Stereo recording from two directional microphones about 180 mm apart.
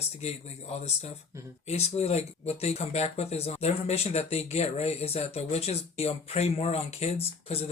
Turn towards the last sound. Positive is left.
turn(degrees=35)  # may be behind; listen again after turning